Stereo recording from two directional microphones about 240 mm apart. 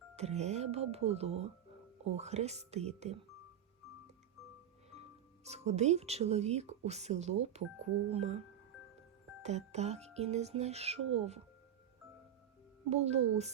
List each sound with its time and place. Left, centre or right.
0.2 s music: right
4.9 s speech: right
9.4 s music: right
12.9 s music: right